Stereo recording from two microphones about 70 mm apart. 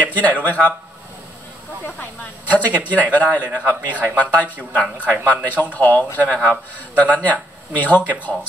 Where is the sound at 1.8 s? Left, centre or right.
Left.